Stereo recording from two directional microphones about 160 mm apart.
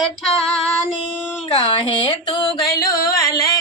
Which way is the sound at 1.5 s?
35° left (ahead or behind).